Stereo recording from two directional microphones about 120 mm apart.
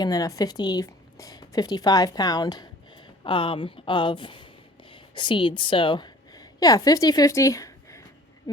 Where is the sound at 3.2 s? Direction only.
45° left (ahead or behind); by 7.7 s 30° left (ahead or behind).